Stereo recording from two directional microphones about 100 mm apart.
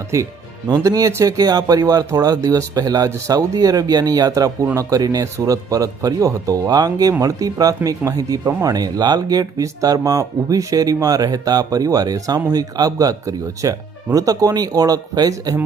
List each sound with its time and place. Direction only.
0.1 s speech: 30° right (ahead or behind)